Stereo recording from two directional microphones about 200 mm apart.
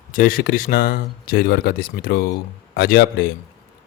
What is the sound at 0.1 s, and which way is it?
Speech, 45° left (ahead or behind).